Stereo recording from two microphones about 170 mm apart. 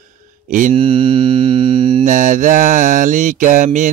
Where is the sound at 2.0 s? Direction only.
50° right (ahead or behind).